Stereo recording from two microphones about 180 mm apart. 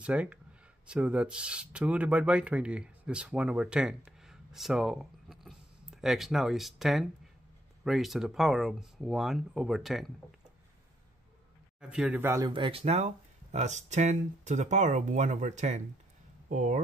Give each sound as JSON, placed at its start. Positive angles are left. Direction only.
{"t": 0.0, "sound": "speech", "side_deg": -5}
{"t": 11.8, "sound": "speech", "side_deg": -5}